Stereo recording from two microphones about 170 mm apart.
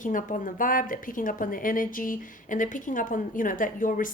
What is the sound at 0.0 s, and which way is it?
A woman's voice, 50° left (ahead or behind).